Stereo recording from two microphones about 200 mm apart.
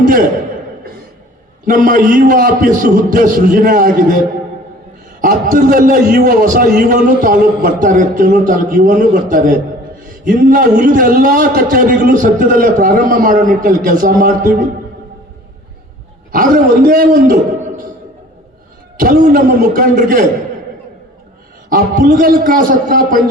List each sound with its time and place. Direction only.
0.0 s a man's voice: 45° right (ahead or behind)
1.6 s a man's voice: 45° right (ahead or behind)
5.2 s a man's voice: 45° right (ahead or behind)
16.3 s a man's voice: 45° right (ahead or behind)
18.9 s a man's voice: 45° right (ahead or behind)
21.7 s a man's voice: 45° right (ahead or behind)